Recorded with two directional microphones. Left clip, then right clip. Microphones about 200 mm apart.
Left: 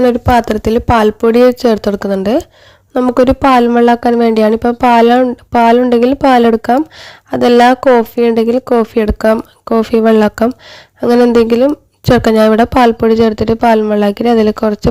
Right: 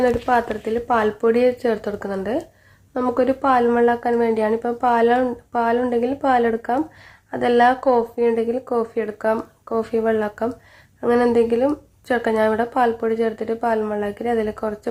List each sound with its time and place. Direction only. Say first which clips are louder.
0.0 s speech: left 8 dB; 50° left (ahead or behind)